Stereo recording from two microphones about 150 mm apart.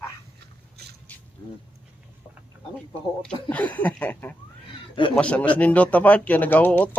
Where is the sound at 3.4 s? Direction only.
10° left (ahead or behind).